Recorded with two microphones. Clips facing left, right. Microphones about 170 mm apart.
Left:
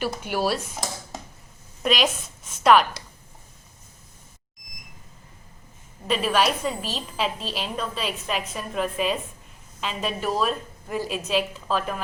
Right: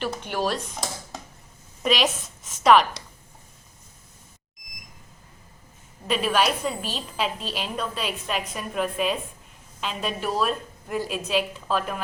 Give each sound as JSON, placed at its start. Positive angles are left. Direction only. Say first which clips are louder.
{"t": 0.0, "sound": "a woman's voice", "louder": "left 1 dB", "side_deg": 10}
{"t": 6.1, "sound": "a woman's voice", "louder": "left 1 dB", "side_deg": 0}